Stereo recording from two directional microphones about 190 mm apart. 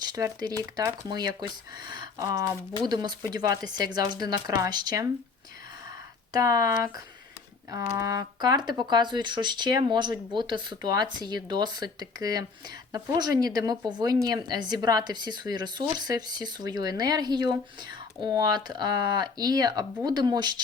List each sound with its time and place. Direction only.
0.0 s speech: 20° right (ahead or behind)
6.3 s speech: 20° right (ahead or behind)